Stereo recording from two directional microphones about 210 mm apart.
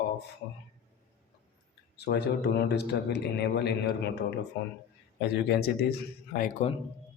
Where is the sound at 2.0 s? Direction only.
50° left (ahead or behind).